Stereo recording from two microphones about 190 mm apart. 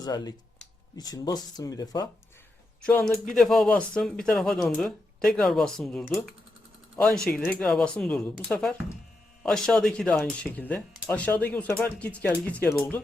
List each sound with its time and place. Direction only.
0.0 s speech: 20° left (ahead or behind)
2.8 s speech: 5° left (ahead or behind)